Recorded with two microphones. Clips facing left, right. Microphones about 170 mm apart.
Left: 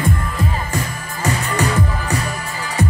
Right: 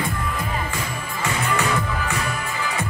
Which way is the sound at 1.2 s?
40° left (ahead or behind).